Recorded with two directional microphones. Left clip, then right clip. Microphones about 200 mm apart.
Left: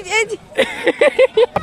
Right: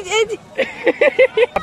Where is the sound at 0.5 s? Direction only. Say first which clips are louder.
Left 3 dB; 60° left (ahead or behind).